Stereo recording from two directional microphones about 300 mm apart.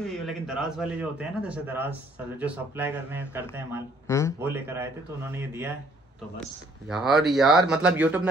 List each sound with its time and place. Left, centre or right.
0.2 s a man's voice: centre
6.9 s a man's voice: centre